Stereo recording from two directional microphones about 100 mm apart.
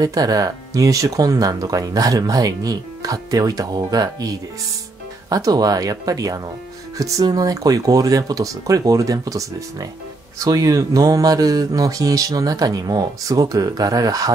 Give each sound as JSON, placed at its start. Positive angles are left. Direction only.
{"t": 0.0, "sound": "speech", "side_deg": -40}